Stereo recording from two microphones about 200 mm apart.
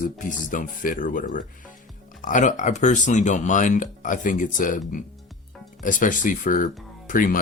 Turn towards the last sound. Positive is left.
turn(degrees=45)  # may be behind; listen again after turning